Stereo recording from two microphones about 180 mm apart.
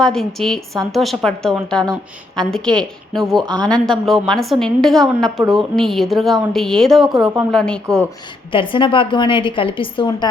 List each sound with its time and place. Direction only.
0.0 s a woman's voice: centre (ahead or behind)
8.5 s a woman's voice: 30° left (ahead or behind)